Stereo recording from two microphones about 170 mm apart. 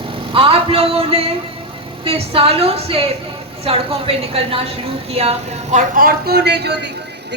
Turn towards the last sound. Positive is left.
turn(degrees=-80)